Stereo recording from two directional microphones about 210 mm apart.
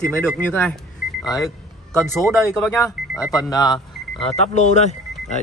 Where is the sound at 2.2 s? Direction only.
5° left (ahead or behind).